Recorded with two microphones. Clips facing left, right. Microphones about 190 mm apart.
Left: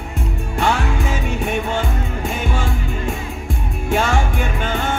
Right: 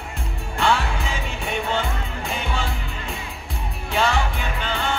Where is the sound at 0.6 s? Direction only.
45° left (ahead or behind).